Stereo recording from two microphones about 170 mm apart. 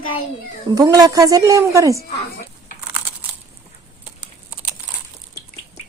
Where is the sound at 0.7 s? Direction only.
20° right (ahead or behind).